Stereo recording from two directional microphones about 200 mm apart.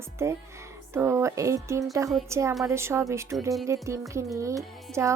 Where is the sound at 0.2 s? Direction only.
15° right (ahead or behind).